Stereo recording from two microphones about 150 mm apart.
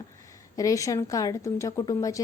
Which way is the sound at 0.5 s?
20° left (ahead or behind).